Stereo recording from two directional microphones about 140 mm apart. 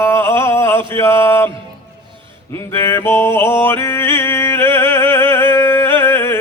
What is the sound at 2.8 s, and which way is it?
Mantra, 20° left (ahead or behind).